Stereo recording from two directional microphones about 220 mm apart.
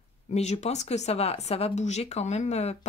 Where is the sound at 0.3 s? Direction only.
30° left (ahead or behind).